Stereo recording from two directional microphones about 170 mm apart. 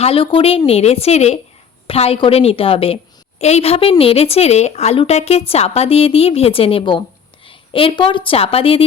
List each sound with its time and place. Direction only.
0.0 s a woman's voice: 35° left (ahead or behind)